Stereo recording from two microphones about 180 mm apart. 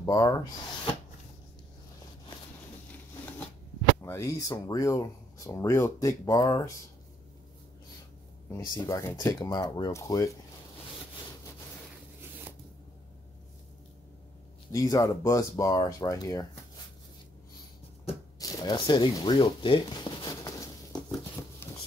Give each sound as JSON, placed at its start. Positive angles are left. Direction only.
{"t": 0.0, "sound": "speech", "side_deg": 20}
{"t": 4.0, "sound": "speech", "side_deg": 15}
{"t": 8.5, "sound": "speech", "side_deg": 20}
{"t": 14.7, "sound": "speech", "side_deg": 20}
{"t": 18.4, "sound": "zipper", "side_deg": 20}
{"t": 21.4, "sound": "a sound", "side_deg": 15}